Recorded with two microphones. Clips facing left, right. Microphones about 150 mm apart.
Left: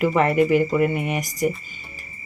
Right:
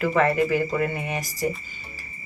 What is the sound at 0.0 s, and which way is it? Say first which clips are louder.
Speech: left 3 dB; 20° left (ahead or behind).